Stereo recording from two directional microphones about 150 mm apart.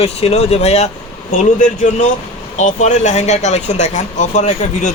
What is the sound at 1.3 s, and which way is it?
A man's voice, 60° left (ahead or behind).